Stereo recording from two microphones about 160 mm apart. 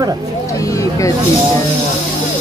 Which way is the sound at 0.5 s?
20° left (ahead or behind).